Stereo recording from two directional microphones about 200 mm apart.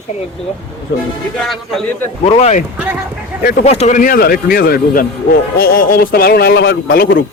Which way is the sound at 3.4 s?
45° left (ahead or behind).